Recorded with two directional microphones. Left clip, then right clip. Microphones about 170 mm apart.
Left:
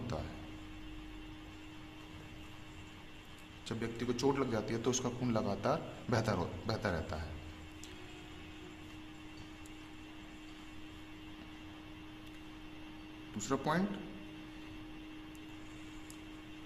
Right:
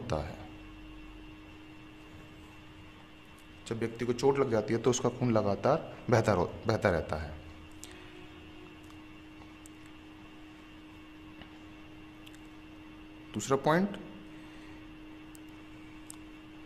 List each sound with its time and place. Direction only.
0.1 s speech: 60° right (ahead or behind)
3.7 s a man's voice: 45° right (ahead or behind)
13.3 s speech: 60° right (ahead or behind)